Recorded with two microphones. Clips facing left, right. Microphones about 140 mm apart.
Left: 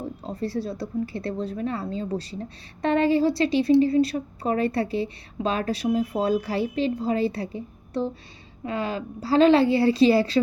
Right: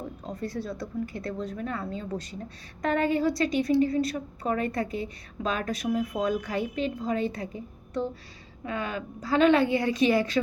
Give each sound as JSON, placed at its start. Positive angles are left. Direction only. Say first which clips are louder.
{"t": 0.3, "sound": "a woman's voice", "louder": "left 4 dB", "side_deg": 30}